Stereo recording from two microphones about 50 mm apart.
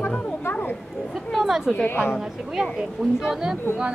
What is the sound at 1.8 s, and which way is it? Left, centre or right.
Speech, left.